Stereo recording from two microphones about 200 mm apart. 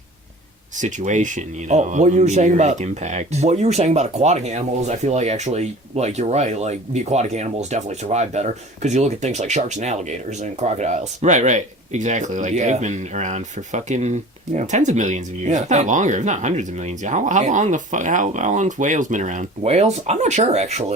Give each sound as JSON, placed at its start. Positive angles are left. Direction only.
{"t": 0.8, "sound": "speech", "side_deg": -40}